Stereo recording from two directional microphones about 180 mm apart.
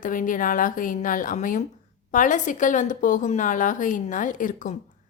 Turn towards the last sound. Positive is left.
turn(degrees=45)  # may be behind; listen again after turning